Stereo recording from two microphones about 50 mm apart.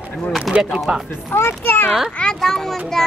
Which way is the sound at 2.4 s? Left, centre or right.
Centre.